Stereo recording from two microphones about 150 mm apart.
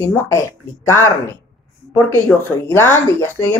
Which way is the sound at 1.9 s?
15° left (ahead or behind).